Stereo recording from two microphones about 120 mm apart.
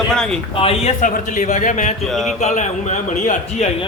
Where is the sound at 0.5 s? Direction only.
55° left (ahead or behind); by 1.9 s 90° left.